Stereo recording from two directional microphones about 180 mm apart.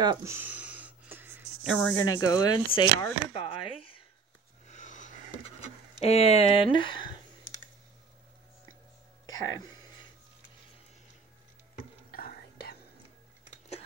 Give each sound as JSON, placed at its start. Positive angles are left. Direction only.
{"t": 0.0, "sound": "a sound", "side_deg": -20}
{"t": 1.7, "sound": "speech", "side_deg": 5}
{"t": 2.0, "sound": "speech", "side_deg": 20}
{"t": 4.6, "sound": "wheeze", "side_deg": 45}
{"t": 5.9, "sound": "speech", "side_deg": 35}
{"t": 9.2, "sound": "music", "side_deg": 20}
{"t": 12.1, "sound": "whispering", "side_deg": 55}